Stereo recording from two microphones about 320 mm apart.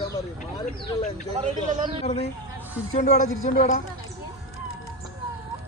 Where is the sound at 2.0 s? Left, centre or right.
Centre.